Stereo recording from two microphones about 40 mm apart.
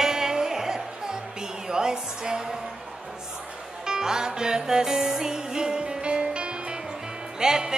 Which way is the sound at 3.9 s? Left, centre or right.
Centre.